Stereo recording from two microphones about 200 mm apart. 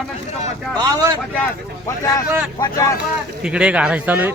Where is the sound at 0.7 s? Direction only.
20° right (ahead or behind).